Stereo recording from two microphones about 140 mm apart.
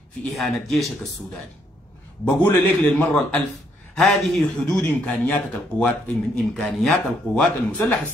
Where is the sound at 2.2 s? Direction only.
20° left (ahead or behind).